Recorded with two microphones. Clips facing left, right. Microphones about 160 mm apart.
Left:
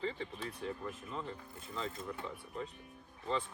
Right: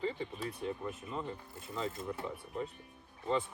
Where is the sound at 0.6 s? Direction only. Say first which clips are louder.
Right 1 dB; 15° right (ahead or behind).